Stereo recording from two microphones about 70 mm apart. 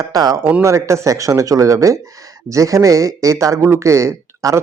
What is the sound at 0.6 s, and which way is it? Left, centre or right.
Speech, right.